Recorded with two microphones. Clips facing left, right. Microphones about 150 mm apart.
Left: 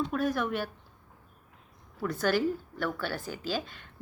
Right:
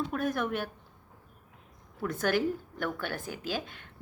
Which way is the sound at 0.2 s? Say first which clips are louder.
Even; 50° right (ahead or behind).